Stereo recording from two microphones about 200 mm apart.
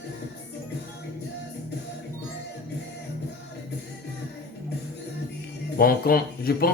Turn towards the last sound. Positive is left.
turn(degrees=50)  # may be behind; listen again after turning